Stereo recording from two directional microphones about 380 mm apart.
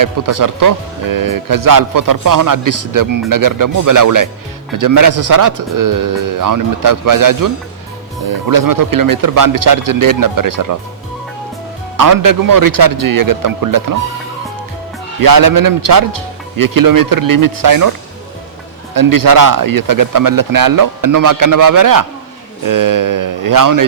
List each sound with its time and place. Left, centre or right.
0.0 s speech: right
11.9 s speech: right
15.2 s speech: right
18.9 s speech: right